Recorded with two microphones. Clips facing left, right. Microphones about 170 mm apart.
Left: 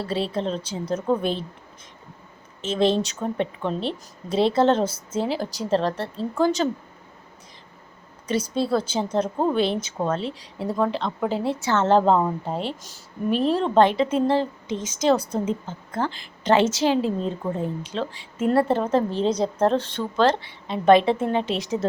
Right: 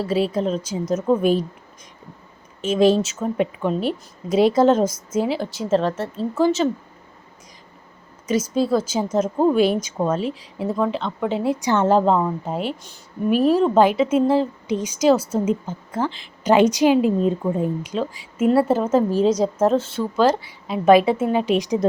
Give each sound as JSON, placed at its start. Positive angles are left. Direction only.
{"t": 0.3, "sound": "a woman's voice", "side_deg": -10}
{"t": 2.6, "sound": "a woman's voice", "side_deg": -10}
{"t": 8.3, "sound": "speech", "side_deg": 35}
{"t": 8.7, "sound": "a woman's voice", "side_deg": -10}
{"t": 11.6, "sound": "a woman's voice", "side_deg": -15}
{"t": 11.9, "sound": "a woman's voice", "side_deg": 0}